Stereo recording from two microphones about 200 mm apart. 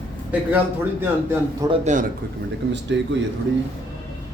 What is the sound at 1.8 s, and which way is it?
Speech, 40° right (ahead or behind).